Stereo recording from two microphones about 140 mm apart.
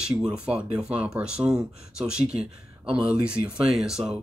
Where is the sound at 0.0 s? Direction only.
5° right (ahead or behind).